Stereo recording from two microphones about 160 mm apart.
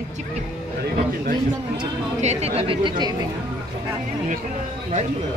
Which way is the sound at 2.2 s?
40° right (ahead or behind).